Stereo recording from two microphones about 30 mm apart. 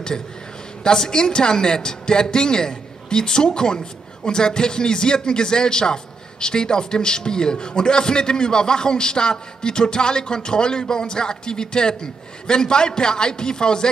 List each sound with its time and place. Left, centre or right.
0.8 s a man's voice: left